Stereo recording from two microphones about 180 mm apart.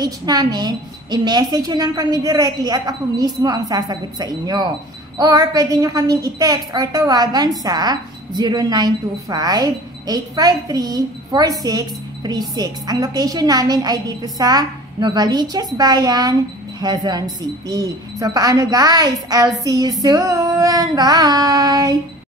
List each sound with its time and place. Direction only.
0.0 s a woman's voice: 20° right (ahead or behind)